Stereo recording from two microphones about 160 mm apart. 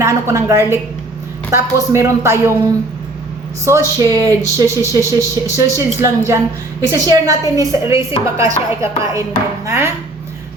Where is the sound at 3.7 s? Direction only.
15° right (ahead or behind).